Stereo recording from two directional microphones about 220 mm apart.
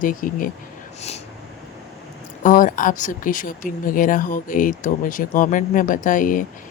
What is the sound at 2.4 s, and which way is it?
Speech, 35° left (ahead or behind).